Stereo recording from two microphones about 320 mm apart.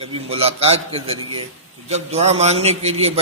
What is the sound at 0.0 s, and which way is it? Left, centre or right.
A man's voice, centre.